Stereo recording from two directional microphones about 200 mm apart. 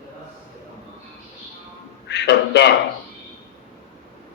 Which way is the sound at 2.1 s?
55° left (ahead or behind).